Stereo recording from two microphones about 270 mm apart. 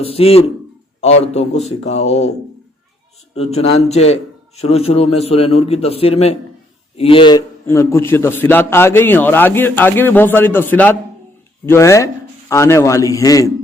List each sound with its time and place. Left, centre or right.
0.0 s a man's voice: left
3.3 s a man's voice: left